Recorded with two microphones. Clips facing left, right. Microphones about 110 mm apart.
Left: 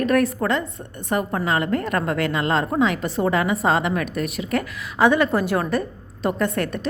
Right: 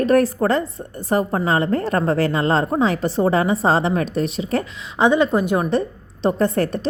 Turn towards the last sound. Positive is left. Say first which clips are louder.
# right 4 dB
turn(degrees=-35)  # may be behind; listen again after turning